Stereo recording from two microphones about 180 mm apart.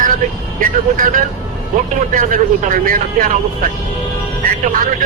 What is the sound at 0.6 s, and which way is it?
Speech, 50° right (ahead or behind).